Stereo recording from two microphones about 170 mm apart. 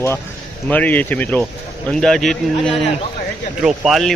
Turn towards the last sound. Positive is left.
turn(degrees=0)  # may be behind; listen again after turning